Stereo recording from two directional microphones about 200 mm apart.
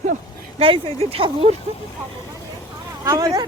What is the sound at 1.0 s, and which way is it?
Speech, 30° right (ahead or behind).